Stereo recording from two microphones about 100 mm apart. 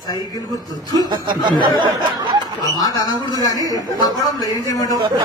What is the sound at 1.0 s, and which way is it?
Speech, 50° right (ahead or behind).